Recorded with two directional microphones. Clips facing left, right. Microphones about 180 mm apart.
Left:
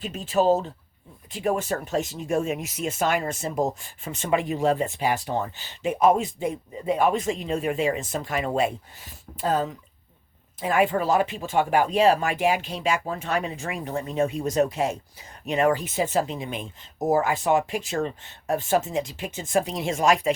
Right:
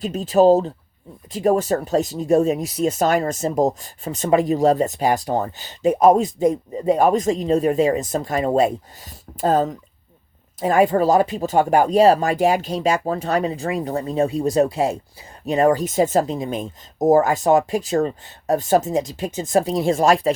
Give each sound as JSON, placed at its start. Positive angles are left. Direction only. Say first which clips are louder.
{"t": 0.0, "sound": "speech", "louder": "right 7 dB", "side_deg": -40}